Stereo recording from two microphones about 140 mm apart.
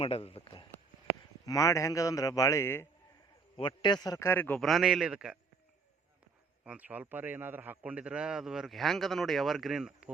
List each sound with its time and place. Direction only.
0.0 s a sound: 45° left (ahead or behind)
1.5 s a man's voice: 25° left (ahead or behind)
3.6 s a man's voice: 35° left (ahead or behind); by 4.6 s 15° left (ahead or behind)
4.6 s a man's voice: centre (ahead or behind)
6.7 s a man's voice: 10° right (ahead or behind)